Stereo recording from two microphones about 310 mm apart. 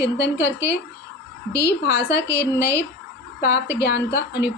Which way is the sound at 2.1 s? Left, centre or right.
Left.